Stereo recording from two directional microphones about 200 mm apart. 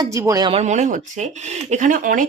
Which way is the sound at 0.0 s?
15° right (ahead or behind).